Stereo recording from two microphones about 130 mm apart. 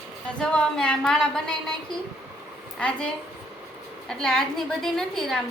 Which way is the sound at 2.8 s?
10° left (ahead or behind).